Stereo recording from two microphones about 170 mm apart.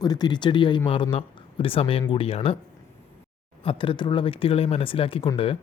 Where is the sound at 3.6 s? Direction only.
30° left (ahead or behind).